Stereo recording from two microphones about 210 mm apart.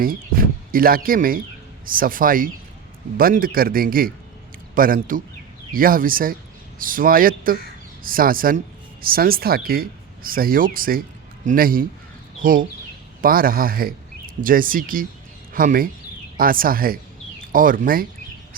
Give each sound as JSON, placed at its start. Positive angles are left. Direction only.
{"t": 0.0, "sound": "speech", "side_deg": -45}